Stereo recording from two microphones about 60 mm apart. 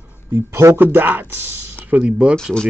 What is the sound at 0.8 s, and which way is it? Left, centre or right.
Speech, right.